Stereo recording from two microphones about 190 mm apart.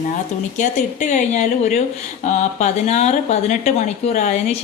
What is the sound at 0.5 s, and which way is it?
Speech, 40° left (ahead or behind).